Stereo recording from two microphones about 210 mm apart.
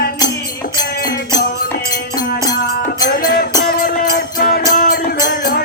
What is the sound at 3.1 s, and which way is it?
Music, 45° left (ahead or behind).